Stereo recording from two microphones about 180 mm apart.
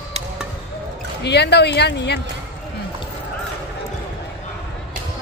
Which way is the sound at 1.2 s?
70° left (ahead or behind).